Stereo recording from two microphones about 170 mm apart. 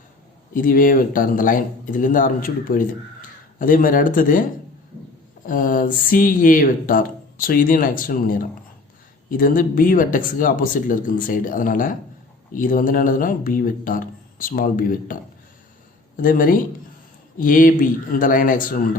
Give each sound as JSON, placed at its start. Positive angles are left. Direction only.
{"t": 0.5, "sound": "speech", "side_deg": 55}
{"t": 5.5, "sound": "speech", "side_deg": 55}